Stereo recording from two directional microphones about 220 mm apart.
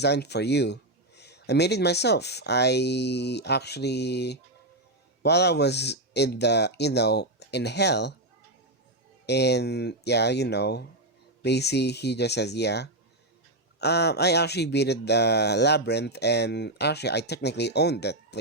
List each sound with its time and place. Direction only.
0.0 s speech: 50° left (ahead or behind)
9.2 s speech: 50° left (ahead or behind)